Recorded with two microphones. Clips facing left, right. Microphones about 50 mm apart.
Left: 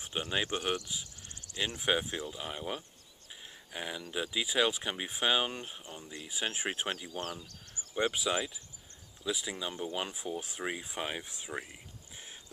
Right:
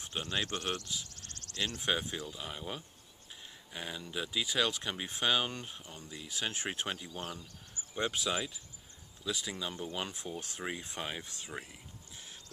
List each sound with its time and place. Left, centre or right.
0.0 s speech: centre
7.1 s speech: left
8.0 s speech: centre